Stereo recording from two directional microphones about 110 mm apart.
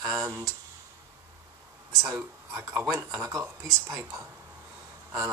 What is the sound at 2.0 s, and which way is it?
Speech, 25° right (ahead or behind).